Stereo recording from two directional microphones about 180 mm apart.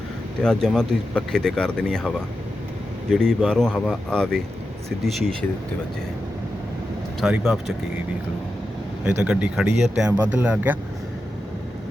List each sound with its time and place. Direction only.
0.4 s speech: 5° left (ahead or behind)
7.2 s speech: centre (ahead or behind)
9.0 s speech: 5° right (ahead or behind)